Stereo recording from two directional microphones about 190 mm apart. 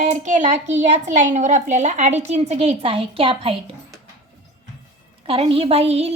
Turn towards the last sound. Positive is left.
turn(degrees=-35)  # may be behind; listen again after turning